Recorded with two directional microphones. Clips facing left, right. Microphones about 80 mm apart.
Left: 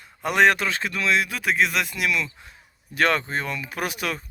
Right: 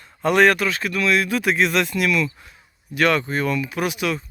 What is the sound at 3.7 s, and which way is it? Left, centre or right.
Speech, left.